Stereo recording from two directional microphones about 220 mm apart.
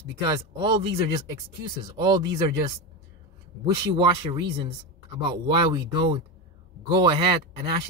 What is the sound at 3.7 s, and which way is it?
Speech, 20° right (ahead or behind).